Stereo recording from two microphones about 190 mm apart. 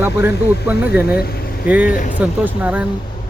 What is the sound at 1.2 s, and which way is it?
Vehicle, 55° left (ahead or behind).